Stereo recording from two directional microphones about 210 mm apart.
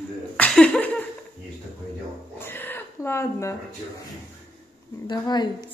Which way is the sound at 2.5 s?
10° left (ahead or behind).